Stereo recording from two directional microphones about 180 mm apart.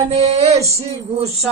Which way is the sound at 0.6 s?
15° right (ahead or behind).